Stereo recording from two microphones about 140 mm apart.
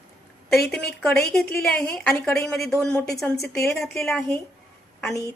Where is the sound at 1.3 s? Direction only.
5° left (ahead or behind).